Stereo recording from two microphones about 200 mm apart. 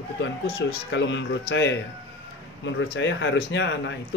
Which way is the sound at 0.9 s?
65° left (ahead or behind).